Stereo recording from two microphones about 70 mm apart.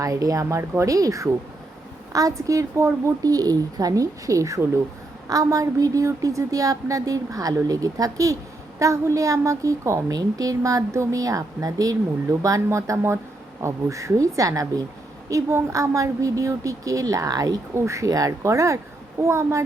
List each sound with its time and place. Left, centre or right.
0.0 s a woman's voice: right
12.6 s a woman's voice: right
15.7 s a woman's voice: right
17.7 s a woman's voice: right